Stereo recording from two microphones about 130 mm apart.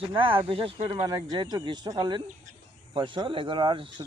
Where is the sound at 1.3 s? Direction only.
30° right (ahead or behind).